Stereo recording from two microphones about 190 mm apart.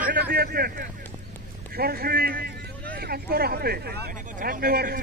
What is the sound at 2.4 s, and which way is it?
Vehicle, 55° right (ahead or behind).